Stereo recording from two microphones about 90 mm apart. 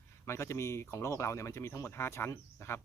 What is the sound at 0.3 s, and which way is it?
Speech, 30° left (ahead or behind).